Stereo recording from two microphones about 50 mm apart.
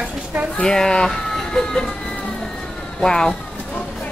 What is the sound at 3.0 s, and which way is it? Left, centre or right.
Speech, centre.